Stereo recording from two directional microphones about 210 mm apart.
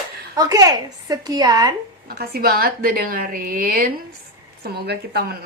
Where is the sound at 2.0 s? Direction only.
45° right (ahead or behind).